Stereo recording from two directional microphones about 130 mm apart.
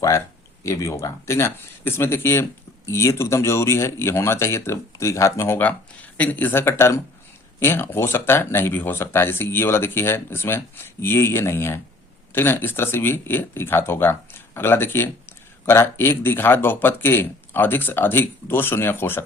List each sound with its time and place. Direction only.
0.6 s speech: 25° left (ahead or behind)